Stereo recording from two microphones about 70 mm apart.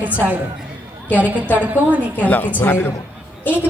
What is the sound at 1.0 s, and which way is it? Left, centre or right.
A woman's voice, right.